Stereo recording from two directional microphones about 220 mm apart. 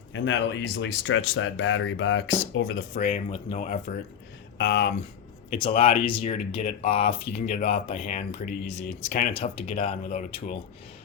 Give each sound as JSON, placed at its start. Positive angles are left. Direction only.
{"t": 0.1, "sound": "speech", "side_deg": 55}
{"t": 2.9, "sound": "speech", "side_deg": 35}
{"t": 4.5, "sound": "speech", "side_deg": 55}
{"t": 5.5, "sound": "speech", "side_deg": 25}
{"t": 9.3, "sound": "speech", "side_deg": 25}